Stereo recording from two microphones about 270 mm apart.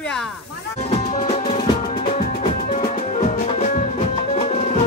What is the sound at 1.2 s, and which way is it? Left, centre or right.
Music, left.